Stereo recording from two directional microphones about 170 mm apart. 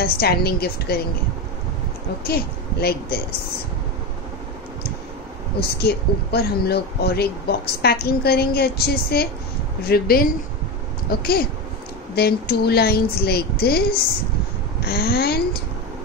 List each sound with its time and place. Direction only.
0.0 s speech: 65° left (ahead or behind)
2.2 s speech: 65° left (ahead or behind)
5.6 s speech: 70° left (ahead or behind)